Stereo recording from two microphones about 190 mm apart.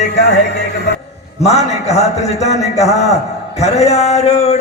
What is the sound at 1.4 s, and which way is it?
A man's voice, 35° left (ahead or behind).